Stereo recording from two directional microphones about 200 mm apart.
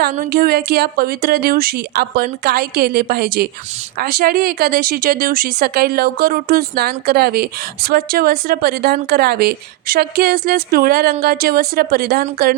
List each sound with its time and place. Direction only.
0.0 s speech: 50° right (ahead or behind)